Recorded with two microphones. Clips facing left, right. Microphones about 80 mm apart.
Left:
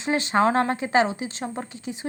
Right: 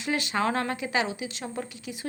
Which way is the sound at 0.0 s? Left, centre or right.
Left.